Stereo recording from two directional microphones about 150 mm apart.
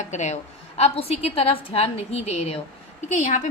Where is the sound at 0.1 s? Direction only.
50° left (ahead or behind).